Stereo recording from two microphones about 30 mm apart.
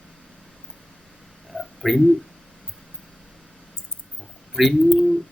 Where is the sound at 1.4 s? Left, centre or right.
Centre.